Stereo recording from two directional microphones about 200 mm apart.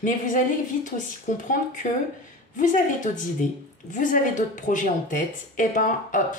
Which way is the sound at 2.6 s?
40° left (ahead or behind).